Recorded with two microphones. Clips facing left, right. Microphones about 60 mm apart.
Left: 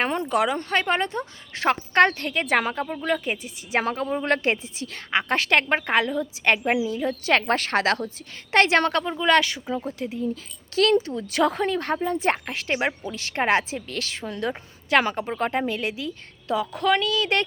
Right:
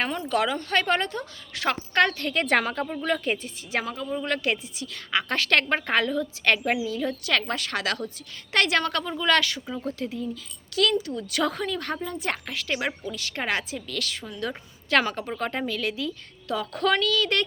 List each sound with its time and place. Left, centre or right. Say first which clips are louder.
0.0 s a woman's voice: left 3 dB; left
2.3 s speech: left 1 dB; centre
3.8 s a woman's voice: left 5 dB; left
7.3 s a woman's voice: left 8 dB; left